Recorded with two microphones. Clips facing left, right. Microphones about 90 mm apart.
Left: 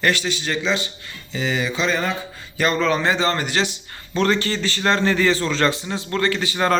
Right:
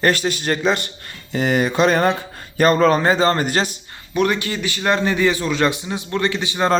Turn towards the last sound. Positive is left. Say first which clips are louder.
# right 1 dB
turn(degrees=-20)  # may be behind; listen again after turning